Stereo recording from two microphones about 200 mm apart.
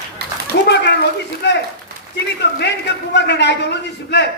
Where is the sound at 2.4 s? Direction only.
60° left (ahead or behind).